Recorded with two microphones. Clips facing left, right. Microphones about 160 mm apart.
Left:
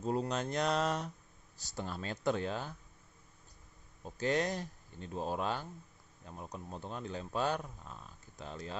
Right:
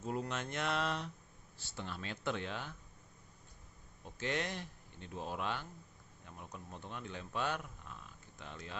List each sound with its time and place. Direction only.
0.0 s speech: 30° left (ahead or behind)
4.0 s speech: 40° left (ahead or behind)